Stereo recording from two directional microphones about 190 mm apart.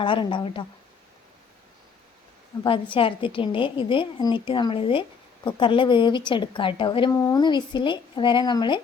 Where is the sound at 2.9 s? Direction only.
25° left (ahead or behind).